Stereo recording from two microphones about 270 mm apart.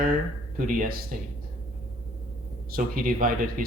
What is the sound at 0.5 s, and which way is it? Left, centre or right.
Speech, right.